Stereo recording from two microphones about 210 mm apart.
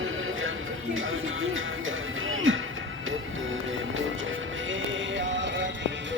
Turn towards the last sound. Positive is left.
turn(degrees=-60)  # may be behind; listen again after turning